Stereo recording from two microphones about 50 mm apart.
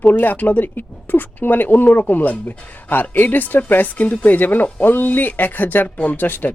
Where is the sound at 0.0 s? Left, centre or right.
Left.